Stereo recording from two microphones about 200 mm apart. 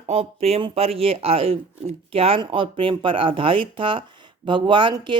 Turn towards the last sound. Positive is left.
turn(degrees=-25)  # may be behind; listen again after turning